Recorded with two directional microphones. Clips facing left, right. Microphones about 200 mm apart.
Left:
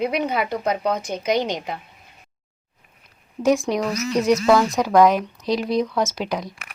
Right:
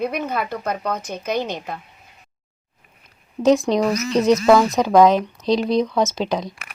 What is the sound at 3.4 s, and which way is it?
Speech, 20° right (ahead or behind).